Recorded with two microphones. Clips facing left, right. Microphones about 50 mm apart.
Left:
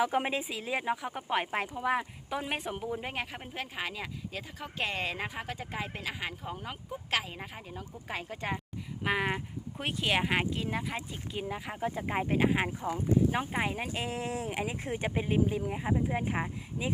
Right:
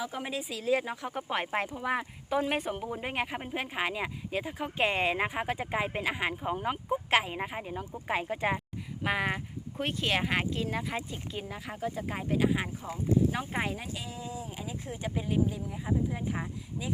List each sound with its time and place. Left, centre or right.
0.0 s speech: left; by 8.6 s centre
9.0 s speech: centre; by 13.5 s left
13.7 s speech: left